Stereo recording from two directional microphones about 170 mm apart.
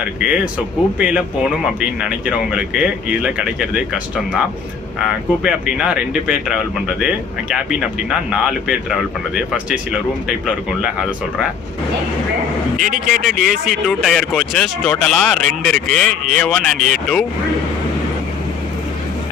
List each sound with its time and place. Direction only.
0.2 s speech: 5° right (ahead or behind)
12.8 s speech: 50° right (ahead or behind)
13.7 s speech: centre (ahead or behind)